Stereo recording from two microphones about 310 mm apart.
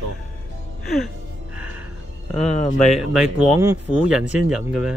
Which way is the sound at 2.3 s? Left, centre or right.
Left.